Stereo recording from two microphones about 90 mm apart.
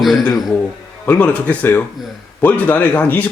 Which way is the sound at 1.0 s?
15° left (ahead or behind).